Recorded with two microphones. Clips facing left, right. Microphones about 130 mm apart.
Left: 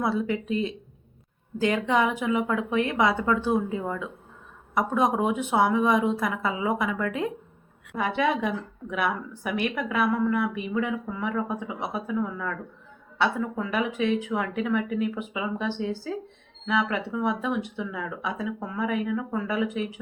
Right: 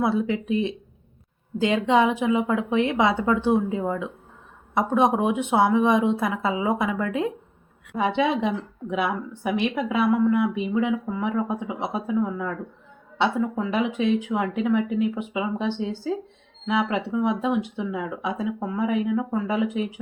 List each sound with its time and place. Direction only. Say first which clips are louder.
0.0 s speech: right 3 dB; 25° right (ahead or behind)